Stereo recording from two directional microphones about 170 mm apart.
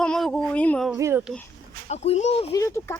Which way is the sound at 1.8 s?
40° left (ahead or behind).